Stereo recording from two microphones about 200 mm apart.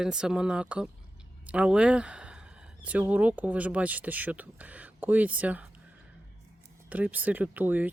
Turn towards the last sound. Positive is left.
turn(degrees=-10)  # may be behind; listen again after turning